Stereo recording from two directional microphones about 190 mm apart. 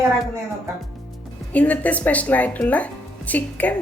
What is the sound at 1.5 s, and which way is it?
Speech, 10° left (ahead or behind).